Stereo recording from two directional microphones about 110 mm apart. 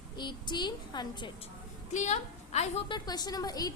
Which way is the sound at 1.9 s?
90° left.